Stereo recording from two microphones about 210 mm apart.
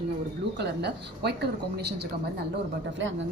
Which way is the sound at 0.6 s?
55° right (ahead or behind).